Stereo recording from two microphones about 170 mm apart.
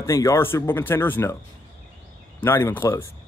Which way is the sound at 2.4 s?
15° left (ahead or behind).